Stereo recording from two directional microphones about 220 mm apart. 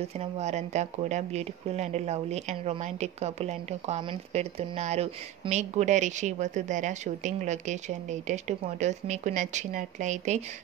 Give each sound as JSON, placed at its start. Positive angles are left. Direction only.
{"t": 0.0, "sound": "a woman's voice", "side_deg": -30}